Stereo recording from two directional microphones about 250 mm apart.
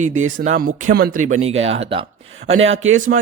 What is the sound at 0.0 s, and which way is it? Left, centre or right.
Speech, right.